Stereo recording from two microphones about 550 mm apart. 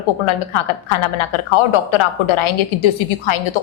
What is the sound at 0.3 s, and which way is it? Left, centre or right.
A woman's voice, left.